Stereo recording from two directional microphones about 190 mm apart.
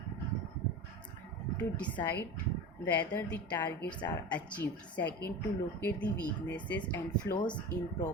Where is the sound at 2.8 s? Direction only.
10° left (ahead or behind).